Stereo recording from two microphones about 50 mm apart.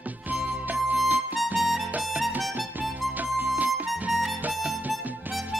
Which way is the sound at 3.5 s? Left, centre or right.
Right.